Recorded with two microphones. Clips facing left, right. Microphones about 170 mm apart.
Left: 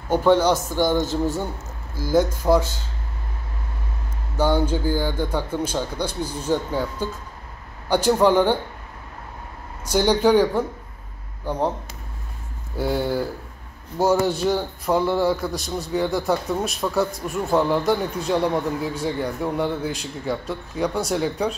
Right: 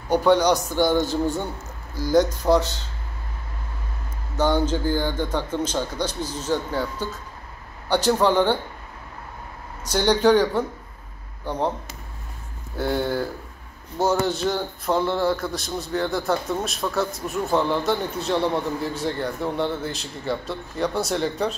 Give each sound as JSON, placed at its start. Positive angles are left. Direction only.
{"t": 0.3, "sound": "speech", "side_deg": -15}
{"t": 0.7, "sound": "a man's voice", "side_deg": 15}
{"t": 1.1, "sound": "a man's voice", "side_deg": 5}
{"t": 4.4, "sound": "a man's voice", "side_deg": 10}
{"t": 9.8, "sound": "a man's voice", "side_deg": 10}
{"t": 12.7, "sound": "a man's voice", "side_deg": 10}